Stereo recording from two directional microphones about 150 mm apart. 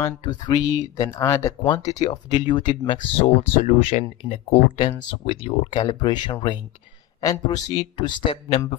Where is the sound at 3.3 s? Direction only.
45° left (ahead or behind).